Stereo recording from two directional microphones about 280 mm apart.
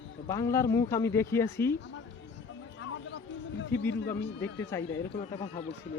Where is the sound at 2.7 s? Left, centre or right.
Left.